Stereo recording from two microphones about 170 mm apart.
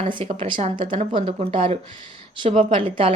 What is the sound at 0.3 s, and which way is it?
Speech, 30° right (ahead or behind).